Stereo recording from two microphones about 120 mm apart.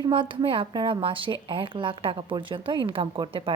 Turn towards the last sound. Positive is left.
turn(degrees=-45)  # may be behind; listen again after turning